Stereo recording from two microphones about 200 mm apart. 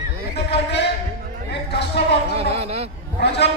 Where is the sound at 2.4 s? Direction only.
30° right (ahead or behind).